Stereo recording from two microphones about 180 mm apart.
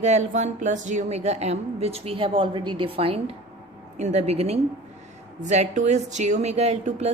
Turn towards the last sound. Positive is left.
turn(degrees=-35)  # may be behind; listen again after turning